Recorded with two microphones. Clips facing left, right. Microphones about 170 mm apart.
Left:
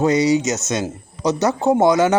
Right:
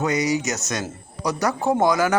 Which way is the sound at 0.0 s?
30° left (ahead or behind).